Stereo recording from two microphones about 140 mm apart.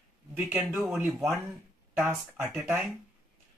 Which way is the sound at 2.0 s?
20° right (ahead or behind).